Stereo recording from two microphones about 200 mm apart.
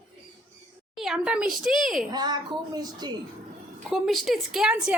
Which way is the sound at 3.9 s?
Centre (ahead or behind).